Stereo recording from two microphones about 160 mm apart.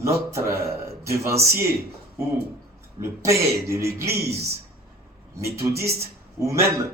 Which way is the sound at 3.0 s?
15° right (ahead or behind).